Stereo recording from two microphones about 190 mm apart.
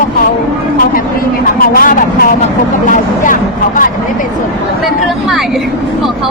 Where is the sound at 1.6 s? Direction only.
50° left (ahead or behind).